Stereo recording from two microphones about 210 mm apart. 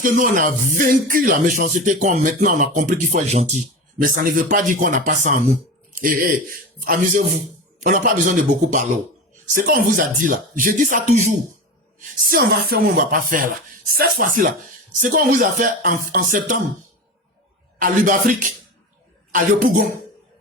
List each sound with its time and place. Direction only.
0.0 s speech: 40° right (ahead or behind)
7.8 s speech: 40° right (ahead or behind)
12.3 s speech: 45° right (ahead or behind)
17.7 s speech: 40° right (ahead or behind)